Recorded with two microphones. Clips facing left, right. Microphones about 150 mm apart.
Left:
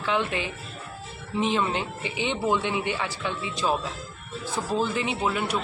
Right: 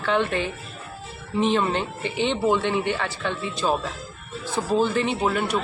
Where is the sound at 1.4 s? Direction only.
10° left (ahead or behind).